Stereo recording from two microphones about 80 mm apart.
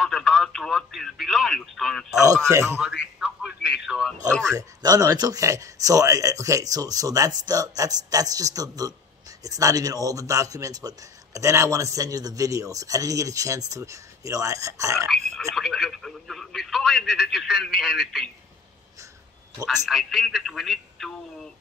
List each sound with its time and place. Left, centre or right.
0.0 s speech: centre
2.2 s speech: right
2.8 s a sound: centre
4.6 s a man's voice: right
15.0 s speech: centre
19.6 s speech: centre